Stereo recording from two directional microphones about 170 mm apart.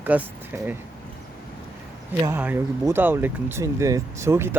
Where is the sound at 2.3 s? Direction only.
10° right (ahead or behind).